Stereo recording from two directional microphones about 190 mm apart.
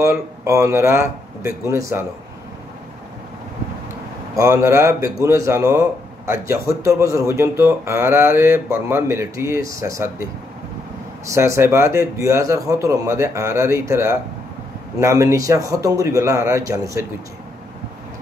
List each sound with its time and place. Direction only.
0.0 s speech: 15° right (ahead or behind)
4.4 s speech: 15° right (ahead or behind)
11.2 s speech: 15° right (ahead or behind)